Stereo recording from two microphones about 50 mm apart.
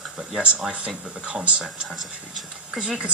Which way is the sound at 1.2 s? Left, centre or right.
Right.